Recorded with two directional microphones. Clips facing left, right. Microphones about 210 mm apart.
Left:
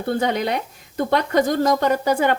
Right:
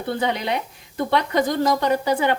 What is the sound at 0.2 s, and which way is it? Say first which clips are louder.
A woman's voice: left 2 dB; 45° left (ahead or behind).